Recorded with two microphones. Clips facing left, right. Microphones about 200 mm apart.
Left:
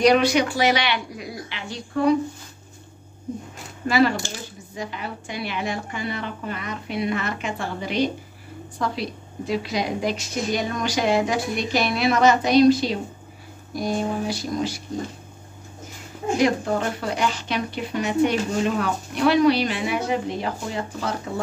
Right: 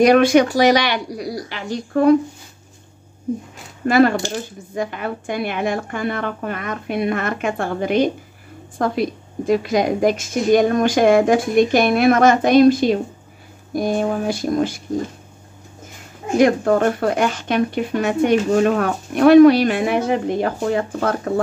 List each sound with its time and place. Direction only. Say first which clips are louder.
0.0 s speech: right 5 dB; 50° right (ahead or behind)
3.8 s speech: right 5 dB; 50° right (ahead or behind)
16.3 s speech: right 7 dB; 50° right (ahead or behind)